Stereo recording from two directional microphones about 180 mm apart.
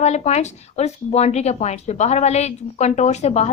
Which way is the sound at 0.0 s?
40° left (ahead or behind).